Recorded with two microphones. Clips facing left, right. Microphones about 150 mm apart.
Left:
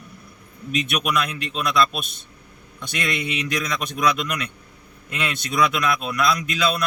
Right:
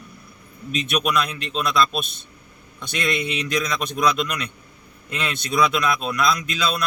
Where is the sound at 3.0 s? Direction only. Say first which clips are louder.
Right 2 dB; 5° left (ahead or behind).